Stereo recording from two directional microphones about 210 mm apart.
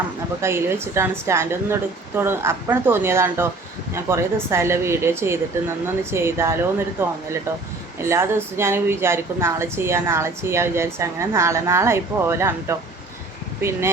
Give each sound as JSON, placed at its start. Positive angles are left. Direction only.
{"t": 0.4, "sound": "a woman's voice", "side_deg": -10}